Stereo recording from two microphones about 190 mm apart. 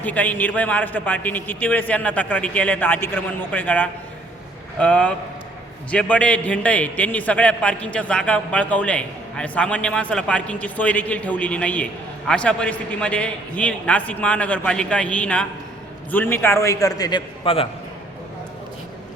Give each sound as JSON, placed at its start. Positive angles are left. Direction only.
{"t": 0.0, "sound": "a man's voice", "side_deg": 10}